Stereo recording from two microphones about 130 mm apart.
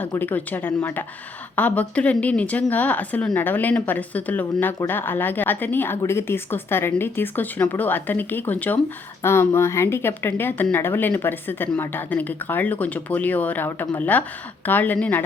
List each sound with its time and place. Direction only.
0.1 s a woman's voice: 15° left (ahead or behind)